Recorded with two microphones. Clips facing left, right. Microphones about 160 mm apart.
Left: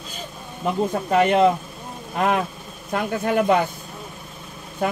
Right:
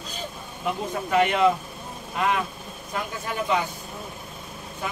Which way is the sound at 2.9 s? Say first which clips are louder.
Left 9 dB; 60° left (ahead or behind).